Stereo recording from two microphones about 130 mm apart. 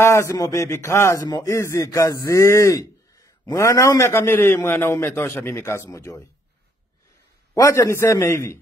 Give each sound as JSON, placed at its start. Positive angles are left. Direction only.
{"t": 0.0, "sound": "speech", "side_deg": 20}
{"t": 7.5, "sound": "speech", "side_deg": 25}